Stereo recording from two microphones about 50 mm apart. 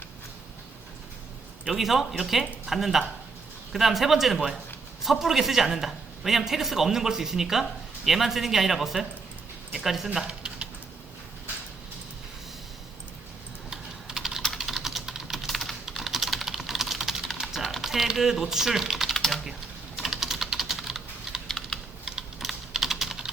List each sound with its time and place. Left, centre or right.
1.6 s a man's voice: centre
10.2 s typing: right
14.6 s typing: centre
19.1 s typing: centre
20.0 s typing: centre
21.4 s typing: centre
22.4 s typing: centre